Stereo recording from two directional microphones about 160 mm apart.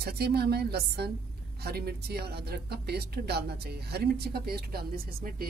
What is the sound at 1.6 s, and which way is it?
Speech, 80° right.